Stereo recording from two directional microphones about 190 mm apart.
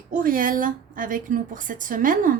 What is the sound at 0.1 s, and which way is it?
A woman's voice, 45° right (ahead or behind).